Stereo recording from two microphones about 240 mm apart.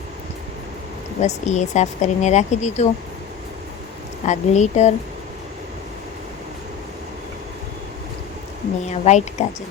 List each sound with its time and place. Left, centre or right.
1.2 s a woman's voice: left
4.3 s a woman's voice: left
8.9 s a woman's voice: left